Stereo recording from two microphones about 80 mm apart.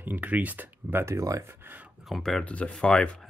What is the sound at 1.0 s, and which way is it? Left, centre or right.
Speech, right.